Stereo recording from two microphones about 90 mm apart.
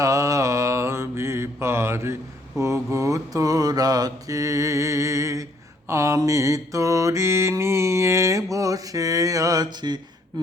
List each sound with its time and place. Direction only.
0.0 s mantra: 35° right (ahead or behind); by 10.0 s 55° right (ahead or behind)